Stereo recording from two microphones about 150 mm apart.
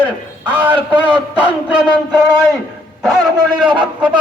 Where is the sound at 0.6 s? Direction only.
30° right (ahead or behind).